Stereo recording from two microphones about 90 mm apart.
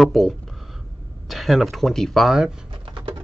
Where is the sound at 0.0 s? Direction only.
Centre (ahead or behind).